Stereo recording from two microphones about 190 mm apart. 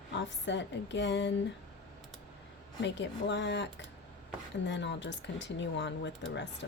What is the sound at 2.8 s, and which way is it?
Speech, 70° left (ahead or behind).